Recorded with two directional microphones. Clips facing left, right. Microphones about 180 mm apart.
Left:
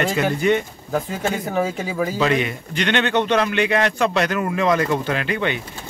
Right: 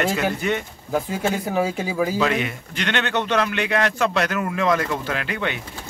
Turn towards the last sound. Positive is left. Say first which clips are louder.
# left 4 dB
turn(degrees=0)  # may be behind; listen again after turning